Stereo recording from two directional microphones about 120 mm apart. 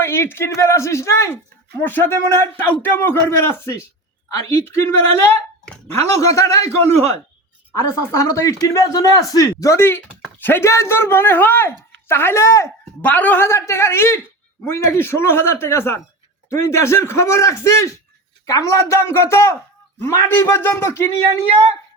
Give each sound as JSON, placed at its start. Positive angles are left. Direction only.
{"t": 0.0, "sound": "speech", "side_deg": 20}
{"t": 6.1, "sound": "speech", "side_deg": 25}
{"t": 7.8, "sound": "speech", "side_deg": 25}
{"t": 13.1, "sound": "speech", "side_deg": 15}
{"t": 21.1, "sound": "speech", "side_deg": -55}